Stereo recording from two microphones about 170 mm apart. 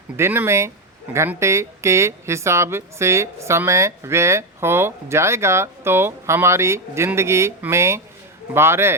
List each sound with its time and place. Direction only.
0.2 s speech: 15° right (ahead or behind)